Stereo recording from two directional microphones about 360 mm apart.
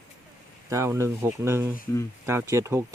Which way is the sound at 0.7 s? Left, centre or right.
Centre.